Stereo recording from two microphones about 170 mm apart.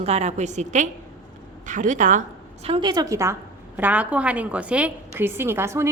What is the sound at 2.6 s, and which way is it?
A woman's voice, 30° right (ahead or behind).